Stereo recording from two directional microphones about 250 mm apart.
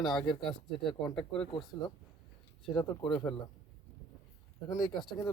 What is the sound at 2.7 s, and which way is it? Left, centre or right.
Speech, centre.